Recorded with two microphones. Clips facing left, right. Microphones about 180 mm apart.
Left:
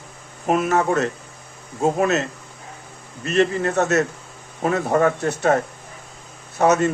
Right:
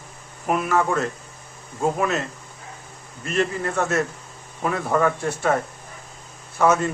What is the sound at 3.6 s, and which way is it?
A man's voice, 40° left (ahead or behind).